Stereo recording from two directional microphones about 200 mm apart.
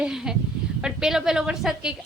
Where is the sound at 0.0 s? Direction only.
5° right (ahead or behind).